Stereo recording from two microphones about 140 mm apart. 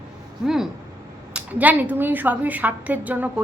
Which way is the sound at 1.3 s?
10° right (ahead or behind).